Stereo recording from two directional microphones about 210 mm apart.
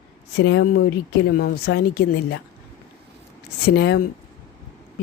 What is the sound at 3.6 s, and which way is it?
Speech, 50° left (ahead or behind).